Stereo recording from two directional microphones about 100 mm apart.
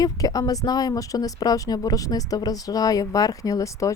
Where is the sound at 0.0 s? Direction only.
40° left (ahead or behind).